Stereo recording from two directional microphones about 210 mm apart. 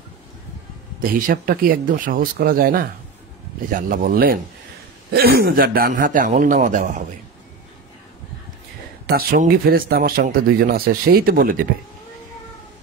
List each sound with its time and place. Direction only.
1.0 s a man's voice: 40° right (ahead or behind)
9.0 s speech: 45° right (ahead or behind)